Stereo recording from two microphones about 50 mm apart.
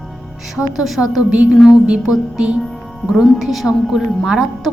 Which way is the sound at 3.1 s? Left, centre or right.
Centre.